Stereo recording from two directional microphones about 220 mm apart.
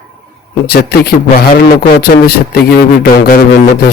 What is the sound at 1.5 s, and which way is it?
Speech, 45° left (ahead or behind).